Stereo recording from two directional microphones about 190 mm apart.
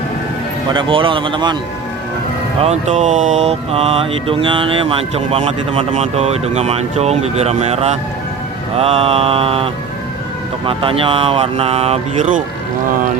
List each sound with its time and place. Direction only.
0.7 s speech: 25° right (ahead or behind)
2.6 s speech: 35° right (ahead or behind)
10.7 s speech: 30° right (ahead or behind)